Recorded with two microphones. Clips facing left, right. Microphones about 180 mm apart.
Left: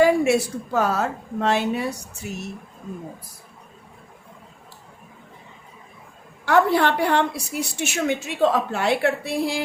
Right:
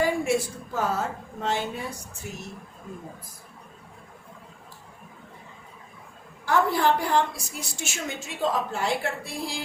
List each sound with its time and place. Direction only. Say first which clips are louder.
0.0 s a woman's voice: left 7 dB; 75° left (ahead or behind)
6.4 s a woman's voice: left 5 dB; 70° left (ahead or behind)